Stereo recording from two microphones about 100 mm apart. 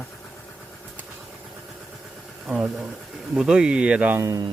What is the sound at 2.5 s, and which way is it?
Speech, 15° right (ahead or behind).